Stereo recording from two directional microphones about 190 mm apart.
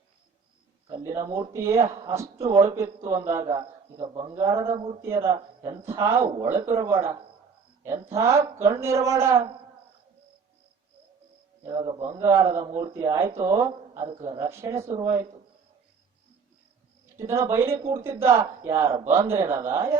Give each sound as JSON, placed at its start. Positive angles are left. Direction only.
{"t": 0.9, "sound": "speech", "side_deg": -20}
{"t": 3.5, "sound": "speech", "side_deg": -25}
{"t": 4.4, "sound": "speech", "side_deg": -15}
{"t": 11.6, "sound": "a man's voice", "side_deg": -20}
{"t": 17.2, "sound": "speech", "side_deg": -15}